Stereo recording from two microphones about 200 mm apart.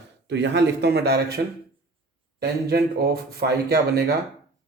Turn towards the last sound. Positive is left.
turn(degrees=-55)  # may be behind; listen again after turning